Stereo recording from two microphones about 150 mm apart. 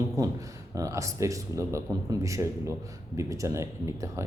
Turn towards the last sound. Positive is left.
turn(degrees=-20)  # may be behind; listen again after turning